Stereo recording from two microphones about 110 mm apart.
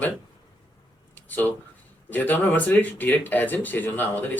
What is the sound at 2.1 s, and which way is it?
A man's voice, 15° left (ahead or behind).